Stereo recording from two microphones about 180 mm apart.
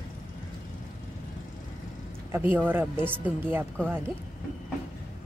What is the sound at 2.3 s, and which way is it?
Speech, 10° right (ahead or behind).